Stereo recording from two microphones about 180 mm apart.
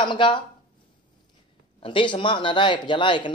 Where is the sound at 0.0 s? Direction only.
25° left (ahead or behind).